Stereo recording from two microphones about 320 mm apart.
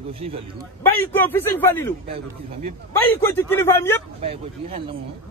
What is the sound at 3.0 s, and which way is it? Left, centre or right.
Speech, centre.